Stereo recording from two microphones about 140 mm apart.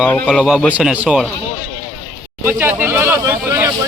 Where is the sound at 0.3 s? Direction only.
Centre (ahead or behind).